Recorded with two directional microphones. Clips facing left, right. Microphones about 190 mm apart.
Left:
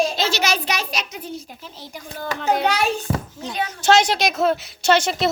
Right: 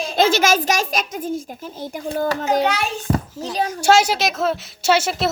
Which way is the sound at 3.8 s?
5° right (ahead or behind).